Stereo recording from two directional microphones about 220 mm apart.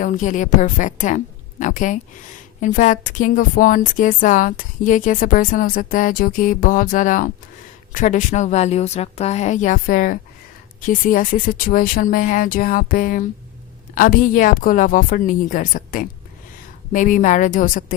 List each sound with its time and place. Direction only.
0.0 s a woman's voice: 35° left (ahead or behind)